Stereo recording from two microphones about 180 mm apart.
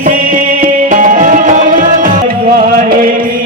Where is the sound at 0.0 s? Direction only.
50° right (ahead or behind).